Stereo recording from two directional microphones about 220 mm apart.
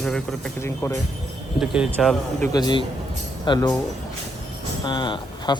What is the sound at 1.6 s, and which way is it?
Speech, 5° right (ahead or behind).